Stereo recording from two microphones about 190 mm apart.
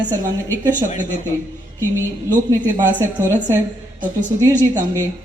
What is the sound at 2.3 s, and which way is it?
A woman's voice, 20° right (ahead or behind).